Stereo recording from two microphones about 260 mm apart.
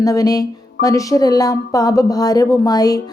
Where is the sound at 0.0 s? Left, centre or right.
Centre.